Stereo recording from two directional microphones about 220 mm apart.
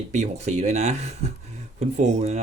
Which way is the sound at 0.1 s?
30° right (ahead or behind).